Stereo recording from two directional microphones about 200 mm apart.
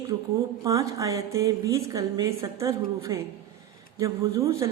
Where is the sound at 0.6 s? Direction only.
15° right (ahead or behind).